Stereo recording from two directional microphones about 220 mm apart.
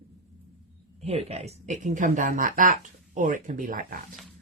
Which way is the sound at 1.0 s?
30° right (ahead or behind).